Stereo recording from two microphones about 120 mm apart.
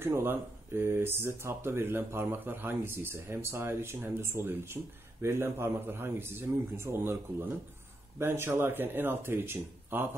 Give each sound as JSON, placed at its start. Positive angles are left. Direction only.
{"t": 0.0, "sound": "speech", "side_deg": -20}